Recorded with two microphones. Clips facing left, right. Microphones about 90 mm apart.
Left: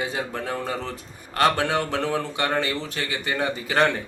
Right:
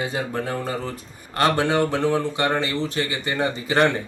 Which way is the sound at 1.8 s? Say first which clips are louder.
Right 4 dB; 15° right (ahead or behind).